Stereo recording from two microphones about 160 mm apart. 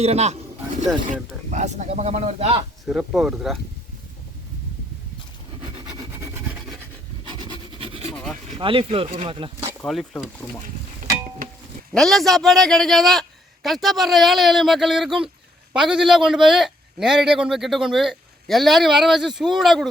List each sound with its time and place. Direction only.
0.0 s speech: 40° right (ahead or behind)
2.8 s a man's voice: 5° right (ahead or behind)
6.1 s rub: 15° right (ahead or behind)
7.3 s rub: 25° right (ahead or behind)
8.1 s vehicle: 5° left (ahead or behind)
8.5 s speech: 30° right (ahead or behind)
9.8 s a man's voice: centre (ahead or behind)
11.9 s a man's voice: centre (ahead or behind)